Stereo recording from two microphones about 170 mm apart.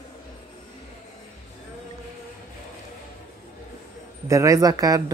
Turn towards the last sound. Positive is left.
turn(degrees=-20)  # may be behind; listen again after turning